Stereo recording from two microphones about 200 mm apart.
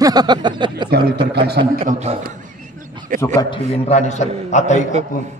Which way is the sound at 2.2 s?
40° right (ahead or behind).